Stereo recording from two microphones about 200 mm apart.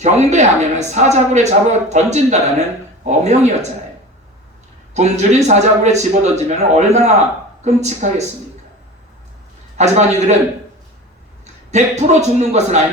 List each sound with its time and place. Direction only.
0.0 s speech: 35° right (ahead or behind)
4.9 s speech: 35° right (ahead or behind)
9.7 s speech: 35° right (ahead or behind)
11.7 s speech: 35° right (ahead or behind)